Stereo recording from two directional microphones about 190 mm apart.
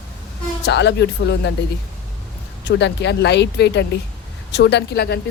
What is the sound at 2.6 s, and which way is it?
Speech, 65° left (ahead or behind).